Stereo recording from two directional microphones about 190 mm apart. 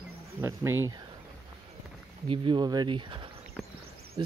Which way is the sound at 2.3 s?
25° right (ahead or behind).